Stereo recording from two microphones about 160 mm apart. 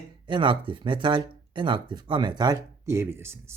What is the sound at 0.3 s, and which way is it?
Speech, 30° right (ahead or behind).